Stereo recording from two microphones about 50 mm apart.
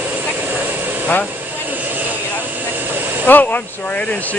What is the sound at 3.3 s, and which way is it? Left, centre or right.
Speech, left.